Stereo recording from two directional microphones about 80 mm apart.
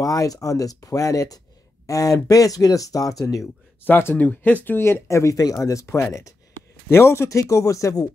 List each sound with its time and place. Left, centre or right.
0.0 s speech: left
3.8 s speech: left